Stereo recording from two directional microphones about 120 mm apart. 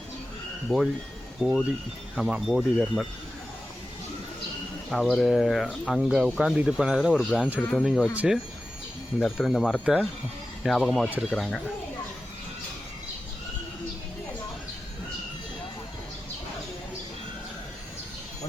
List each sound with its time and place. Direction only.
0.7 s speech: 15° left (ahead or behind)
1.4 s speech: 5° right (ahead or behind)
4.9 s speech: centre (ahead or behind)
8.1 s speech: 10° right (ahead or behind)
9.1 s speech: centre (ahead or behind)